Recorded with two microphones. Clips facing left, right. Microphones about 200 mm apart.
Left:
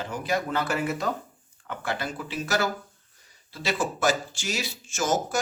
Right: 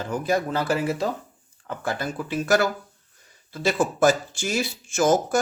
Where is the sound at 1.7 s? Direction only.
45° right (ahead or behind).